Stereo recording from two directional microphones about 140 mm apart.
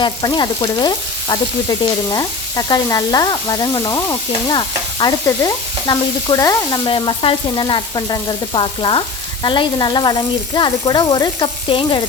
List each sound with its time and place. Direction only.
0.0 s frying: 30° left (ahead or behind)
1.8 s stir: 30° left (ahead or behind)
6.8 s frying: 35° left (ahead or behind)